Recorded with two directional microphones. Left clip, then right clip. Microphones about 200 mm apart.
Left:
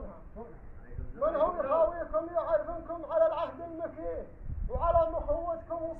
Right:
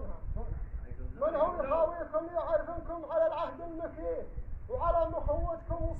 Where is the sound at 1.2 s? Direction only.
Centre (ahead or behind).